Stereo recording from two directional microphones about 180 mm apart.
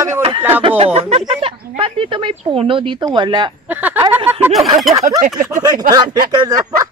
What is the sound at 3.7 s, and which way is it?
Speech, 10° right (ahead or behind).